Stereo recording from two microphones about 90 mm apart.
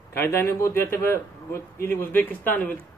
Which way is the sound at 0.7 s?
30° left (ahead or behind).